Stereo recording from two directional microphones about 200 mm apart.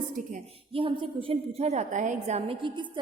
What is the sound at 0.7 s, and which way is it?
A woman's voice, 25° right (ahead or behind).